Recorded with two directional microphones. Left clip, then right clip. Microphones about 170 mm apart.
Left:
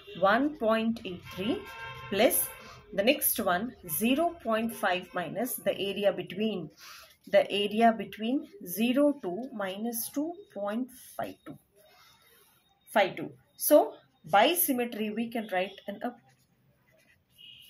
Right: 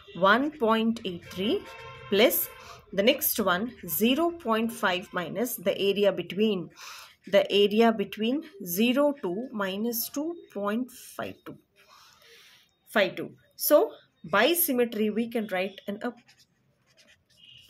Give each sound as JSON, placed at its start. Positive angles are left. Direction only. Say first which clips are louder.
{"t": 0.6, "sound": "a woman's voice", "louder": "right 3 dB", "side_deg": -40}
{"t": 12.9, "sound": "a woman's voice", "louder": "right 1 dB", "side_deg": -45}